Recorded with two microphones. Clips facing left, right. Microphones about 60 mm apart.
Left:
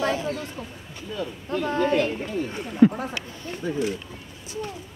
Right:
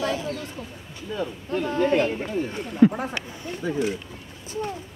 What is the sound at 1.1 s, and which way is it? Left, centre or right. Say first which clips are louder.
Speech: right 1 dB; right.